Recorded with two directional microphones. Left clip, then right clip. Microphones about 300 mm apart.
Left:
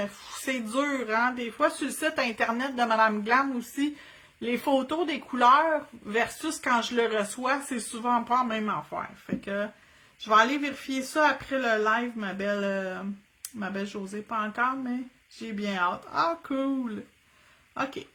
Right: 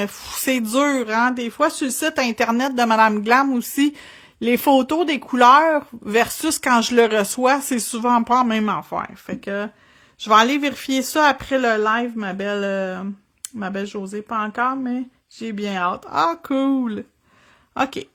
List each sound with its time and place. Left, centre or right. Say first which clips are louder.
0.0 s speech: right 8 dB; right